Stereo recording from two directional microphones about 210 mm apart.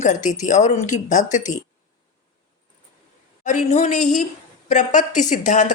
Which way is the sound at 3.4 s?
35° left (ahead or behind).